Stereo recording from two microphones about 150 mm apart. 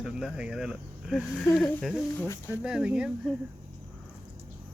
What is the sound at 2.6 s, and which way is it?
Speech, 5° right (ahead or behind).